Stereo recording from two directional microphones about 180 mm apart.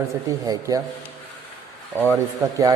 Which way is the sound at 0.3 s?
20° right (ahead or behind).